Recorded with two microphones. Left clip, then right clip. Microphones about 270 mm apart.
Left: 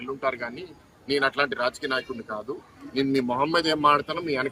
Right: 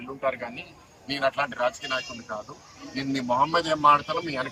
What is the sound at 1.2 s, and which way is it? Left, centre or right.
Speech, left.